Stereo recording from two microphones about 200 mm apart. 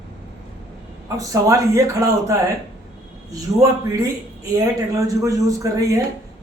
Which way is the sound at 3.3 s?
15° right (ahead or behind).